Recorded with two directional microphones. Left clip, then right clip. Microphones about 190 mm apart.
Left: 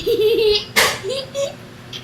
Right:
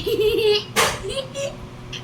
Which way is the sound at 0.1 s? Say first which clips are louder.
Left 4 dB; 15° right (ahead or behind).